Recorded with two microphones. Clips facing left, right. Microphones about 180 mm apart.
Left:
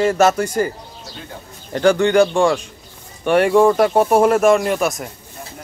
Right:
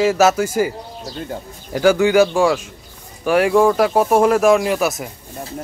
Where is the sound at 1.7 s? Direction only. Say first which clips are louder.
Even; 5° right (ahead or behind).